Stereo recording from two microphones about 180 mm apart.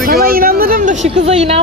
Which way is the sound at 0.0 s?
55° right (ahead or behind).